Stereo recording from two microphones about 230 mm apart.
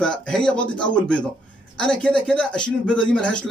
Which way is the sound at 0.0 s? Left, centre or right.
Centre.